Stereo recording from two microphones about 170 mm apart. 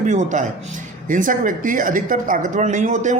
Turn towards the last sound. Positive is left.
turn(degrees=-45)  # may be behind; listen again after turning